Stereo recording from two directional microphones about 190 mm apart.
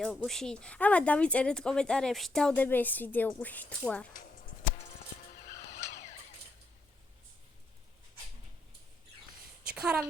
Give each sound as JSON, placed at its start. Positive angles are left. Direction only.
{"t": 0.0, "sound": "a woman's voice", "side_deg": 0}
{"t": 4.1, "sound": "music", "side_deg": 45}
{"t": 9.7, "sound": "speech", "side_deg": -5}